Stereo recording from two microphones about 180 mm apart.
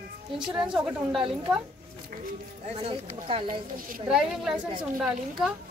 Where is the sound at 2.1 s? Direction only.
50° right (ahead or behind).